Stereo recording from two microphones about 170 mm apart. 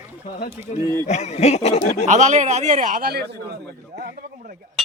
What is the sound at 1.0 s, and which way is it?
Speech, 40° left (ahead or behind).